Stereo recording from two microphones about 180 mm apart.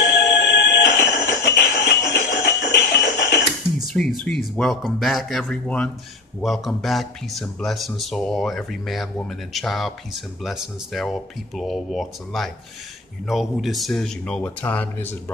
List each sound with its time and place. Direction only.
0.0 s music: 70° left (ahead or behind)
3.9 s speech: 5° left (ahead or behind)